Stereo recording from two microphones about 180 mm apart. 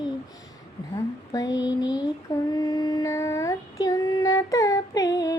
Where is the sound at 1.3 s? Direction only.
20° left (ahead or behind).